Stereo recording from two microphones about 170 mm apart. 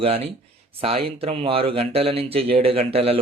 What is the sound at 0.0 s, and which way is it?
Speech, 35° right (ahead or behind).